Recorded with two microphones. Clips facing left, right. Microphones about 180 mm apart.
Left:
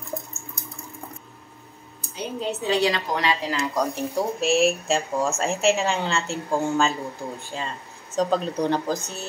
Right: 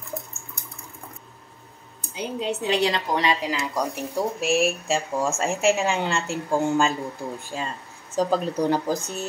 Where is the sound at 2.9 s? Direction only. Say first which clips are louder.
Right 1 dB; 15° right (ahead or behind).